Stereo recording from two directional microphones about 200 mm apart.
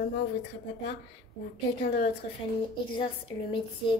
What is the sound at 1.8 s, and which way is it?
A woman's voice, 35° left (ahead or behind).